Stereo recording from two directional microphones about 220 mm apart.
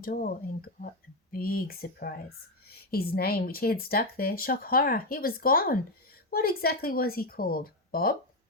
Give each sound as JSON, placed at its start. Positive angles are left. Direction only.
{"t": 0.0, "sound": "speech", "side_deg": 40}